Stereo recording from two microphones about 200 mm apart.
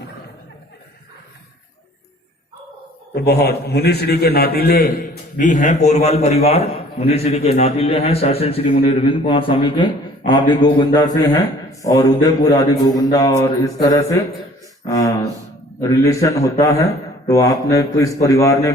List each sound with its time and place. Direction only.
3.2 s a man's voice: 55° left (ahead or behind)
5.4 s a man's voice: 40° left (ahead or behind); by 18.7 s 15° left (ahead or behind)